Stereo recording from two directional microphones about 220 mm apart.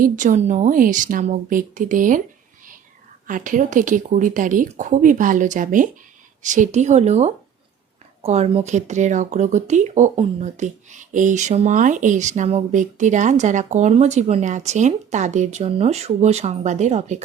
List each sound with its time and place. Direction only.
0.0 s speech: 35° right (ahead or behind)
3.2 s speech: 35° right (ahead or behind)